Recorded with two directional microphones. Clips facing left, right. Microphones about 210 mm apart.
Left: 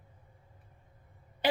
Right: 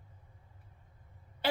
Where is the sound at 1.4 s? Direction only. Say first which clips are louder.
Left 3 dB; 15° left (ahead or behind).